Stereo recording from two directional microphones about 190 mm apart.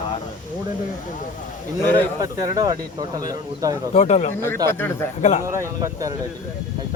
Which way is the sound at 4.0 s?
35° left (ahead or behind).